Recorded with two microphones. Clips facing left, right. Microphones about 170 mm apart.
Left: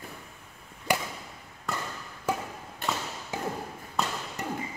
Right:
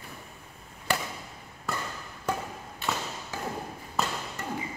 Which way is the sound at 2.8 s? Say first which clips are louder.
Even; 45° left (ahead or behind).